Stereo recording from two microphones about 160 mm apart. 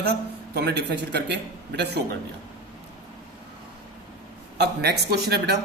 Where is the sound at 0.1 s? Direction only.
90° right.